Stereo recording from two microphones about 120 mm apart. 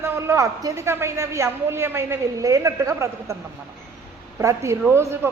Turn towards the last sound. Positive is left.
turn(degrees=-20)  # may be behind; listen again after turning